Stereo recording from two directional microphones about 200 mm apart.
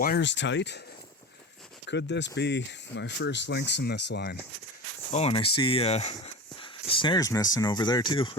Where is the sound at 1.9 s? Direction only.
60° left (ahead or behind).